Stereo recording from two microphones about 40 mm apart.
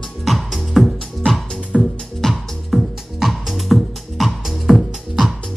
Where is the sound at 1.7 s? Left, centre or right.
Centre.